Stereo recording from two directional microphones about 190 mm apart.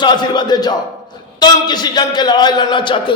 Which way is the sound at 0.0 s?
20° left (ahead or behind).